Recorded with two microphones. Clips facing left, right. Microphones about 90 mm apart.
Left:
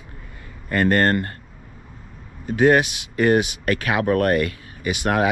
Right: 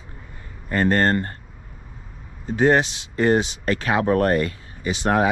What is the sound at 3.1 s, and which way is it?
Speech, 65° left (ahead or behind).